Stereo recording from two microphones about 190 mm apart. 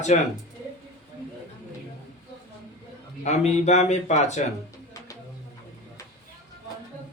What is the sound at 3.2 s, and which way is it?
Speech, 35° left (ahead or behind).